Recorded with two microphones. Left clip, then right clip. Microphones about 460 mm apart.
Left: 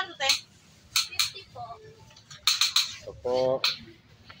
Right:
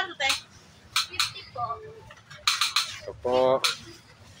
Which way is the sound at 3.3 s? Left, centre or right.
Left.